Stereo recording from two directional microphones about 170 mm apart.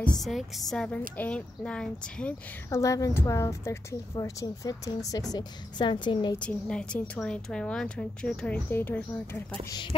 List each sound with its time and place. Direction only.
0.2 s a woman's voice: centre (ahead or behind)
2.7 s a woman's voice: 20° left (ahead or behind)
6.4 s a woman's voice: 5° left (ahead or behind)